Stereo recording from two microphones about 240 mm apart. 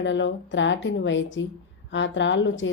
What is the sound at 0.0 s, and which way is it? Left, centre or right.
A woman's voice, left.